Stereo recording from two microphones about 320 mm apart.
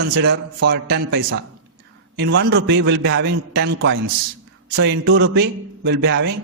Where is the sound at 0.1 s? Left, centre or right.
Right.